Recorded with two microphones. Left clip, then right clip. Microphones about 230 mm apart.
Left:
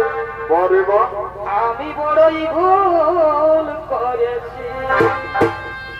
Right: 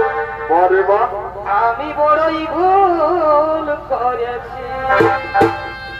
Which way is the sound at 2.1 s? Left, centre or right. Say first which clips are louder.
Left 3 dB; right.